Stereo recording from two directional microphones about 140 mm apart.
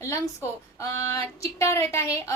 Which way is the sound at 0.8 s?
20° left (ahead or behind).